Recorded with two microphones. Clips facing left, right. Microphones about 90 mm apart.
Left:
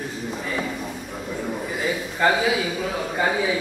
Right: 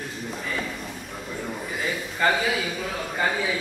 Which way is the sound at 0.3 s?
5° left (ahead or behind).